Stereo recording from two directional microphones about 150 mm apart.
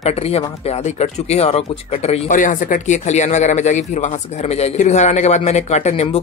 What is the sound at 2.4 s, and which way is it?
Speech, 60° left (ahead or behind).